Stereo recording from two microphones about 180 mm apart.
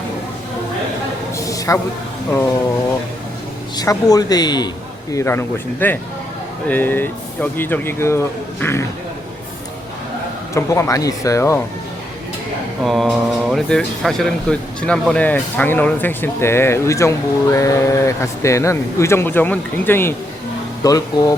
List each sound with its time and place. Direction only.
1.5 s a sound: 15° left (ahead or behind)
3.8 s speech: 20° left (ahead or behind)
10.5 s speech: 15° left (ahead or behind)
12.8 s speech: centre (ahead or behind); by 21.3 s 20° left (ahead or behind)